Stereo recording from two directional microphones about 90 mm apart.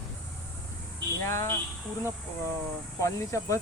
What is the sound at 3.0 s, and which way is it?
Speech, 35° left (ahead or behind).